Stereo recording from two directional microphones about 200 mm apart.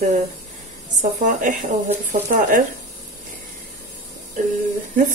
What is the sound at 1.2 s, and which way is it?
Speech, 40° right (ahead or behind).